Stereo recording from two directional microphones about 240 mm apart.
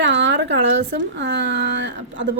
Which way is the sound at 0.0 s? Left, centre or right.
Right.